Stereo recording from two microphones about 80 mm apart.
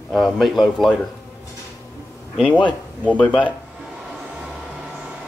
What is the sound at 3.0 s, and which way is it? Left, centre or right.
Speech, centre.